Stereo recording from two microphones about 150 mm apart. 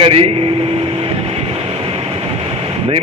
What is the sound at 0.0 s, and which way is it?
Speech, 40° right (ahead or behind).